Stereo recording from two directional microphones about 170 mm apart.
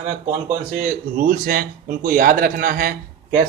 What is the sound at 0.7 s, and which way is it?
A man's voice, 60° right (ahead or behind).